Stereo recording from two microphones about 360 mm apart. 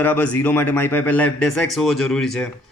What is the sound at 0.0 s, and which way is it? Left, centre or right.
Speech, centre.